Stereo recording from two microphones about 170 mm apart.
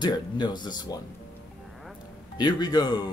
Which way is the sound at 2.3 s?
25° left (ahead or behind).